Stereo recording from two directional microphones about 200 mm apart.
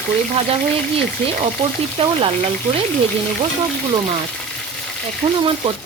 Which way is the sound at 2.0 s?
30° right (ahead or behind).